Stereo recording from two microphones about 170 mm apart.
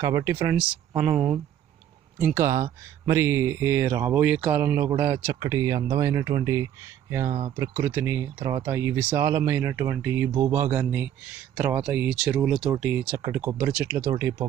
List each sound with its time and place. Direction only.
0.0 s speech: 15° right (ahead or behind)